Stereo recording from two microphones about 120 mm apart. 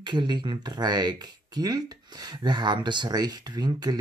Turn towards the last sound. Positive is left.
turn(degrees=-35)  # may be behind; listen again after turning